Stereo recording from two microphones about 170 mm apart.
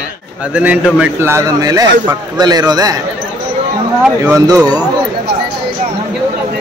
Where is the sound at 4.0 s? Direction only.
15° right (ahead or behind).